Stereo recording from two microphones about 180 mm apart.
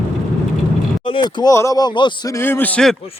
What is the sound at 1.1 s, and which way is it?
Speech, 25° left (ahead or behind).